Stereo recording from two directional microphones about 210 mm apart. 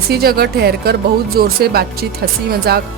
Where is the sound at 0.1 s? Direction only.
50° right (ahead or behind).